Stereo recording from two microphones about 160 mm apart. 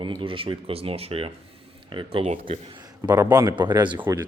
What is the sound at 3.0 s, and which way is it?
Speech, 20° right (ahead or behind).